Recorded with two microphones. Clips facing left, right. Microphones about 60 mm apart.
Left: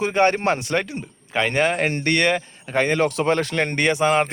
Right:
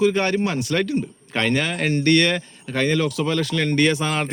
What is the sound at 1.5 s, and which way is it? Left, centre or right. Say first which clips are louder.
Speech: left 2 dB; left.